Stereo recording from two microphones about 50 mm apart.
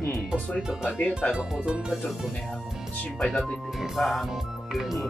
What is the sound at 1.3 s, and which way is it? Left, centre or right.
Speech, centre.